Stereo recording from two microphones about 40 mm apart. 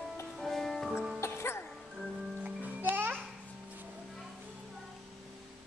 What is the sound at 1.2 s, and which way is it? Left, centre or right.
Music, left.